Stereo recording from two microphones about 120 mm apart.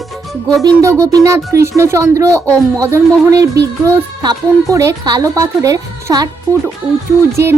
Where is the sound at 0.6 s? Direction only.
25° right (ahead or behind).